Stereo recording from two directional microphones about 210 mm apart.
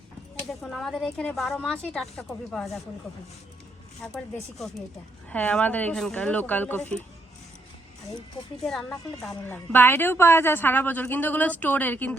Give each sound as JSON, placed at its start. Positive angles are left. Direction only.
{"t": 0.6, "sound": "a woman's voice", "side_deg": 0}
{"t": 4.0, "sound": "a woman's voice", "side_deg": 0}
{"t": 5.3, "sound": "a woman's voice", "side_deg": 5}
{"t": 8.6, "sound": "a woman's voice", "side_deg": 0}